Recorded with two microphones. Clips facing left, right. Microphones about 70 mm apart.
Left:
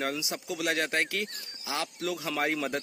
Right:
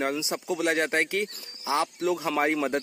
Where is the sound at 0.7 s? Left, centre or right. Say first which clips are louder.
Right 4 dB; centre.